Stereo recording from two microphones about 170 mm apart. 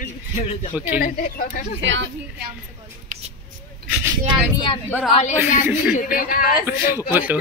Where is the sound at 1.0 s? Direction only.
55° left (ahead or behind).